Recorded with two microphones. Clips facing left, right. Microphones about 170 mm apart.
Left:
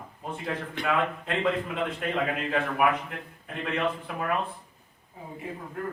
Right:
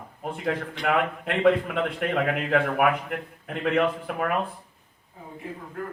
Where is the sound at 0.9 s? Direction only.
65° right (ahead or behind).